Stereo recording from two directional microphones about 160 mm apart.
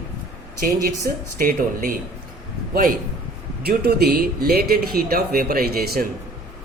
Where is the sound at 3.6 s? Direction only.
80° right.